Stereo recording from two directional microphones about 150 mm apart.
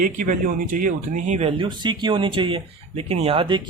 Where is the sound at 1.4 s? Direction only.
30° right (ahead or behind).